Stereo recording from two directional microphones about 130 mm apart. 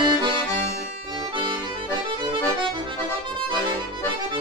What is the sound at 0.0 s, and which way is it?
Accordion, 35° right (ahead or behind).